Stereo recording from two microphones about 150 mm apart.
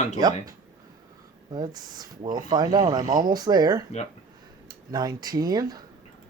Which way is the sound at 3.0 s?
60° right (ahead or behind).